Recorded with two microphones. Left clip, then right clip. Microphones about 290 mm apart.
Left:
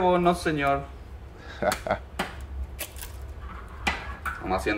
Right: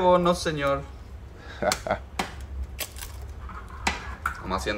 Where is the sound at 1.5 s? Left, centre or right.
Centre.